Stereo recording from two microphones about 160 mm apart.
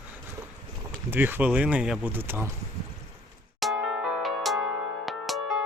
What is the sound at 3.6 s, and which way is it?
Music, centre (ahead or behind).